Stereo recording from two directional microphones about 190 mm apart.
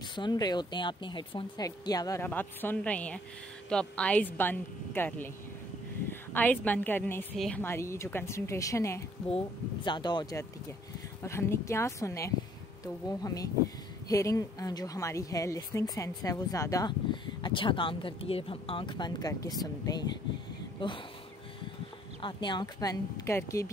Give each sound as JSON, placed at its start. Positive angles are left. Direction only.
{"t": 0.1, "sound": "a woman's voice", "side_deg": 25}
{"t": 22.2, "sound": "speech", "side_deg": 25}